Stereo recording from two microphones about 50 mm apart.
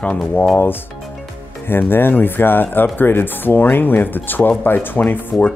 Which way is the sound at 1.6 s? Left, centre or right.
Left.